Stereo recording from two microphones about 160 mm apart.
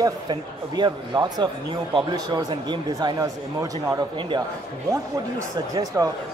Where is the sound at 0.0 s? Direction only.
30° right (ahead or behind).